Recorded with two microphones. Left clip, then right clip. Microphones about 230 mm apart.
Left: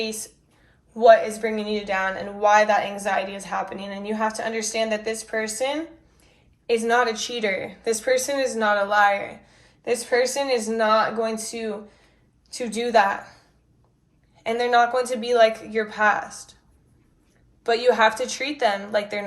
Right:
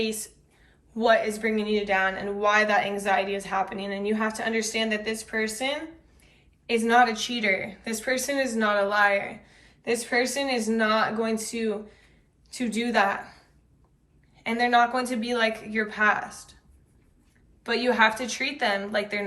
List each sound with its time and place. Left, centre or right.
0.9 s a woman's voice: centre
17.6 s a woman's voice: centre